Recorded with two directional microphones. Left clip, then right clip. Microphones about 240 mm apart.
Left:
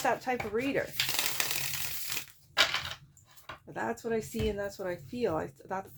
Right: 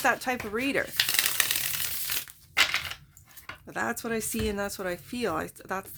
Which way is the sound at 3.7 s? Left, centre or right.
Right.